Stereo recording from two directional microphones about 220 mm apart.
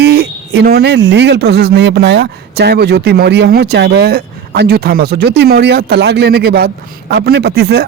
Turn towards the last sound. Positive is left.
turn(degrees=-45)  # may be behind; listen again after turning